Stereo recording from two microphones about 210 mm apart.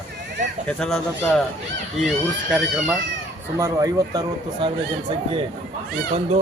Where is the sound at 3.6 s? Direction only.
15° right (ahead or behind).